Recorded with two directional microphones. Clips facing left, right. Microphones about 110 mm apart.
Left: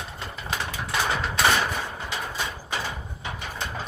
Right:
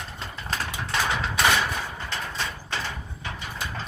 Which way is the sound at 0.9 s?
10° left (ahead or behind).